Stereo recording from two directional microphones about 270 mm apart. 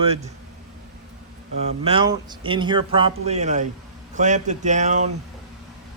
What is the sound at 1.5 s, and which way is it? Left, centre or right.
Speech, right.